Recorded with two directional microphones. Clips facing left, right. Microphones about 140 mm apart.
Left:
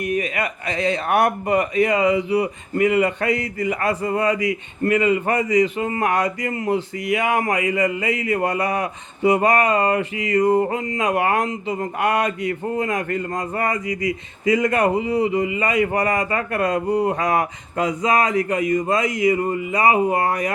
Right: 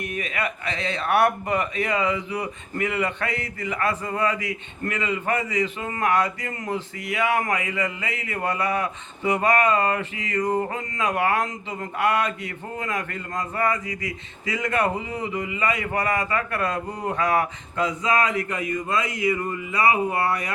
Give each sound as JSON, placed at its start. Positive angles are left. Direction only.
{"t": 0.2, "sound": "speech", "side_deg": 40}
{"t": 5.8, "sound": "speech", "side_deg": 30}
{"t": 8.0, "sound": "speech", "side_deg": -30}
{"t": 8.3, "sound": "speech", "side_deg": 35}
{"t": 10.0, "sound": "speech", "side_deg": -35}
{"t": 10.3, "sound": "speech", "side_deg": 35}
{"t": 13.8, "sound": "speech", "side_deg": -35}
{"t": 14.6, "sound": "speech", "side_deg": 35}
{"t": 19.0, "sound": "a sound", "side_deg": -30}
{"t": 19.3, "sound": "speech", "side_deg": 30}